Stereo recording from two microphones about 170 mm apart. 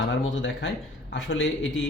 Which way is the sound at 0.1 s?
90° left.